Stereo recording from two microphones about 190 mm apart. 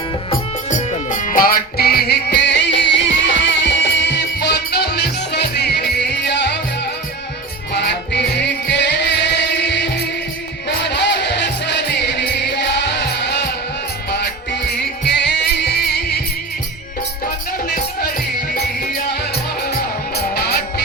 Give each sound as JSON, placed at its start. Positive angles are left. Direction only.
{"t": 1.1, "sound": "music", "side_deg": 45}
{"t": 7.7, "sound": "music", "side_deg": 60}
{"t": 15.0, "sound": "music", "side_deg": 60}
{"t": 19.1, "sound": "music", "side_deg": 55}